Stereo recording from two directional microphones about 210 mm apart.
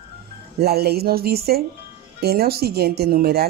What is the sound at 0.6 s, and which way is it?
A woman's voice, 50° right (ahead or behind).